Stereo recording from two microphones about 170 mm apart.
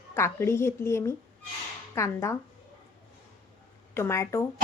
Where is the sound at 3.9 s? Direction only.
15° left (ahead or behind).